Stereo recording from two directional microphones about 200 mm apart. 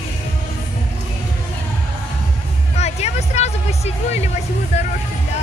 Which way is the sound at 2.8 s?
35° left (ahead or behind).